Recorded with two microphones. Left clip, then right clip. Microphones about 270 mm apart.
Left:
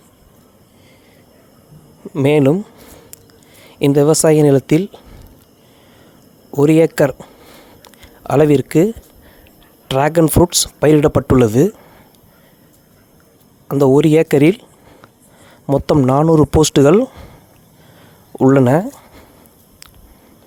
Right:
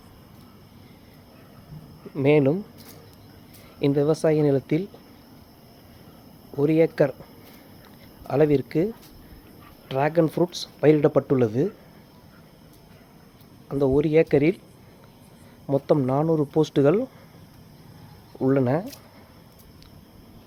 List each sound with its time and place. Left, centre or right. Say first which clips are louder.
2.1 s speech: left 7 dB; left
3.8 s speech: left 10 dB; left
6.5 s speech: left 9 dB; left
9.9 s speech: left 9 dB; left
13.7 s speech: left 10 dB; left
15.6 s speech: left 8 dB; left
18.3 s speech: left 11 dB; left